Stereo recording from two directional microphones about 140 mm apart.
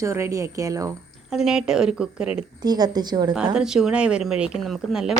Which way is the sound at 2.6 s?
30° right (ahead or behind).